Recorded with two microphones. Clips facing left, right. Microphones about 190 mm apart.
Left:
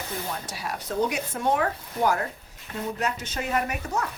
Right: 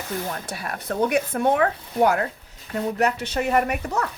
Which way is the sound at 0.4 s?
55° right (ahead or behind).